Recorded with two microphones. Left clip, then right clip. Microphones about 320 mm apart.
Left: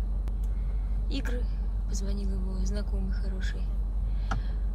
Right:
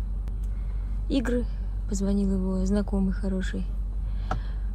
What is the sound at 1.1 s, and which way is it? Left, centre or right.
Speech, centre.